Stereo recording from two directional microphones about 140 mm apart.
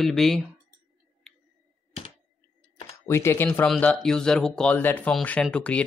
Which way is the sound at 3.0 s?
20° left (ahead or behind).